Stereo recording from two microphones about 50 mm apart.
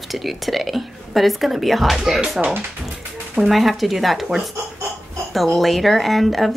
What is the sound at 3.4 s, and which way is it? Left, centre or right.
Speech, centre.